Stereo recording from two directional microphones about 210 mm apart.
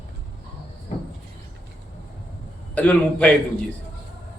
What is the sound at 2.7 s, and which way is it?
Speech, 5° left (ahead or behind).